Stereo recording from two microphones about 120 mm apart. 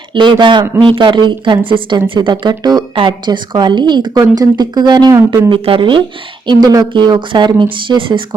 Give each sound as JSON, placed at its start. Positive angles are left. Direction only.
{"t": 0.1, "sound": "speech", "side_deg": -40}
{"t": 5.5, "sound": "speech", "side_deg": -50}
{"t": 6.5, "sound": "speech", "side_deg": -35}